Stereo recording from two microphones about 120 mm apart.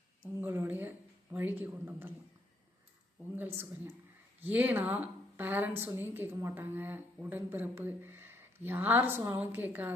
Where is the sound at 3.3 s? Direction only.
15° right (ahead or behind).